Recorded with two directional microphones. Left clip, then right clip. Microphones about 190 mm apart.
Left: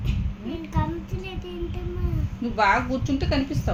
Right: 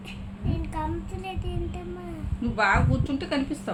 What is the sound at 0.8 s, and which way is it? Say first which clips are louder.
Child singing: left 2 dB; 20° right (ahead or behind).